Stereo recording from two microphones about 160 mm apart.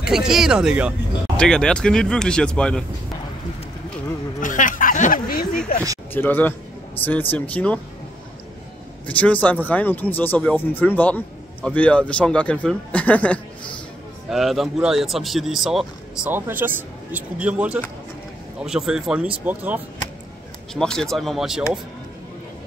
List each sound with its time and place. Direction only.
0.0 s speech: 5° right (ahead or behind)
1.3 s speech: 5° left (ahead or behind)
4.4 s a sound: 55° left (ahead or behind)
6.1 s a man's voice: 10° left (ahead or behind)
9.0 s a man's voice: 10° left (ahead or behind)
16.3 s a man's voice: 15° right (ahead or behind)
20.7 s speech: 5° left (ahead or behind)